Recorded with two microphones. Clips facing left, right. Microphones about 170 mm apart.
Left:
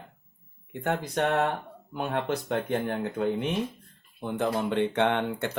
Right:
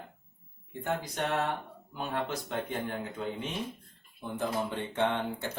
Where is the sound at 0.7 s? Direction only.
60° left (ahead or behind).